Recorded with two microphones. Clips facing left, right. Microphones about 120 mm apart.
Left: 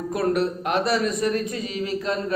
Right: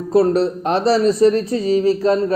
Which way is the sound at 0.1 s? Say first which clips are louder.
Right 9 dB; 30° right (ahead or behind).